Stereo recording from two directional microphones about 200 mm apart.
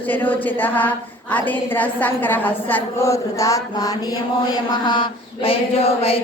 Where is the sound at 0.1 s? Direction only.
10° left (ahead or behind).